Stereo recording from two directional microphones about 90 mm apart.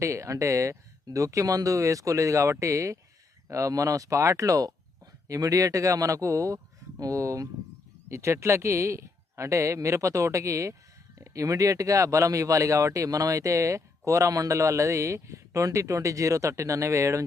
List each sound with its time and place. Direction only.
0.0 s speech: 35° right (ahead or behind)